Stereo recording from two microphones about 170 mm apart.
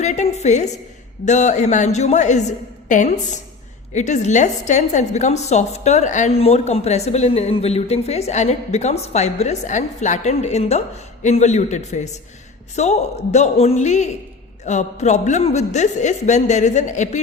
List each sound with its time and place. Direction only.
0.0 s a woman's voice: 45° left (ahead or behind)